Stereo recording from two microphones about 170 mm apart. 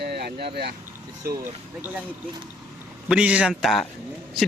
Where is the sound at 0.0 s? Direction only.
75° right (ahead or behind).